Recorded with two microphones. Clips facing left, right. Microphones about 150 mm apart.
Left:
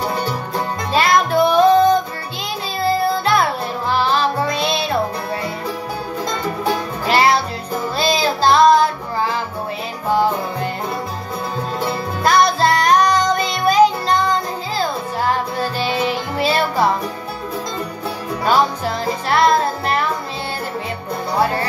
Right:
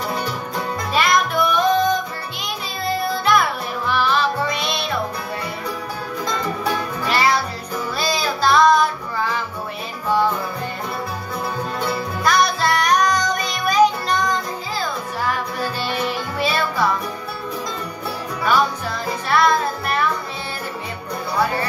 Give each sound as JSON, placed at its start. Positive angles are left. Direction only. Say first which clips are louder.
{"t": 0.9, "sound": "music", "louder": "left 4 dB", "side_deg": 30}
{"t": 7.1, "sound": "music", "louder": "left 4 dB", "side_deg": 30}
{"t": 12.2, "sound": "music", "louder": "left 4 dB", "side_deg": 30}
{"t": 16.3, "sound": "music", "louder": "left 4 dB", "side_deg": 30}
{"t": 18.4, "sound": "music", "louder": "left 3 dB", "side_deg": 30}